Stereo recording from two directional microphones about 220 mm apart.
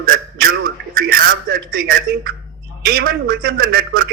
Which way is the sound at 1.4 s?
45° right (ahead or behind).